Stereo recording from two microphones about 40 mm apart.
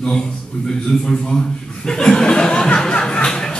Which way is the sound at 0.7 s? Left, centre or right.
Centre.